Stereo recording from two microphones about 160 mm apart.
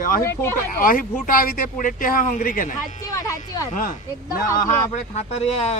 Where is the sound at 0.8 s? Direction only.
60° left (ahead or behind).